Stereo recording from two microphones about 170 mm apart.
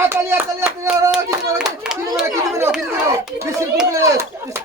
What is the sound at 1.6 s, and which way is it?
Speech, 5° right (ahead or behind).